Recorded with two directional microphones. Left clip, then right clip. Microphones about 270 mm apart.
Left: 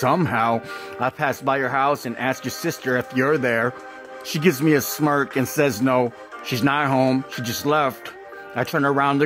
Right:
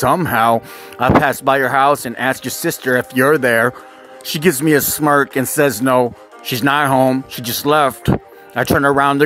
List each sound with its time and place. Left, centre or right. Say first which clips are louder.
0.0 s speech: right 6 dB; centre